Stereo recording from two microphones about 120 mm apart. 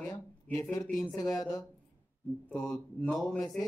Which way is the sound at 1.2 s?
30° left (ahead or behind).